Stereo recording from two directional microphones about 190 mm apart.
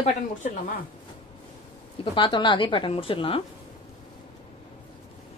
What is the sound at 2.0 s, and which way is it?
Speech, 25° left (ahead or behind).